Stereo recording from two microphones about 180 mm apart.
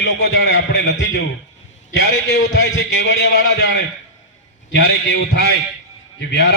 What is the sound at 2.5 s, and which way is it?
A man's voice, 90° left.